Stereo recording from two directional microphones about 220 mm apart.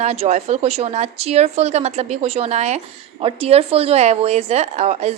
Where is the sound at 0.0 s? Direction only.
30° right (ahead or behind).